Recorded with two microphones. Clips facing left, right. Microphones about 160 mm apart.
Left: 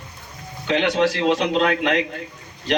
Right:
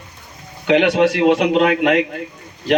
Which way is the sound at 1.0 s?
55° right (ahead or behind).